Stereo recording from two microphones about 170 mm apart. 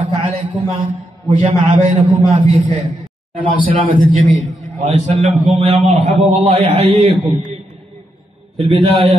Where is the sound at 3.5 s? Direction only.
30° right (ahead or behind).